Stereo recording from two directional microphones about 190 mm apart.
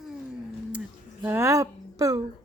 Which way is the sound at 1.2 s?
10° right (ahead or behind).